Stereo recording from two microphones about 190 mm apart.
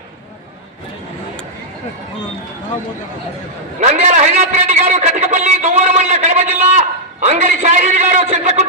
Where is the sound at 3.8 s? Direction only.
40° right (ahead or behind).